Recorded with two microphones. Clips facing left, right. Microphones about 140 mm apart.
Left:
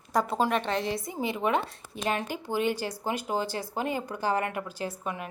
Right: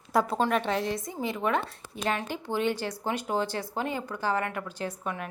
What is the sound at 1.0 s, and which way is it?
Speech, 10° left (ahead or behind).